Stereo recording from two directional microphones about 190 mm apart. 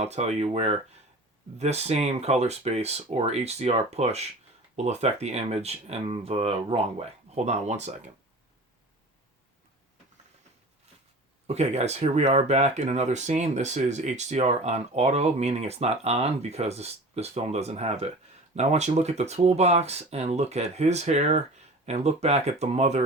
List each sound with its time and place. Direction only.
0.0 s speech: 35° right (ahead or behind)
11.4 s speech: 35° right (ahead or behind)